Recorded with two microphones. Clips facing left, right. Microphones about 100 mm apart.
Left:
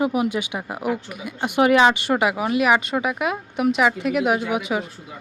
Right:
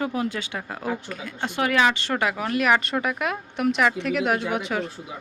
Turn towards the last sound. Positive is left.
turn(degrees=5)  # may be behind; listen again after turning